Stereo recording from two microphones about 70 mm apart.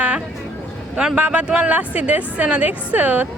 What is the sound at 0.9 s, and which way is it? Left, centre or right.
A woman's voice, centre.